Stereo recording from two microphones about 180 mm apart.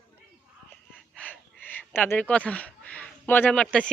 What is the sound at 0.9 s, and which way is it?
Gasp, 10° left (ahead or behind).